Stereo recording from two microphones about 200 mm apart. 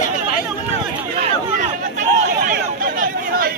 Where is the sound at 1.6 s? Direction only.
40° right (ahead or behind).